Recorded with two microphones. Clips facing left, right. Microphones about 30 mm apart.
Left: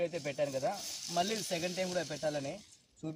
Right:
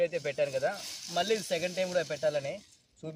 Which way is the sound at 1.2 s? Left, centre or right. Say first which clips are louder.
Right 6 dB; centre.